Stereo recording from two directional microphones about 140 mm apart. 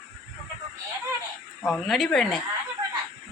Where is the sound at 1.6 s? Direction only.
Centre (ahead or behind).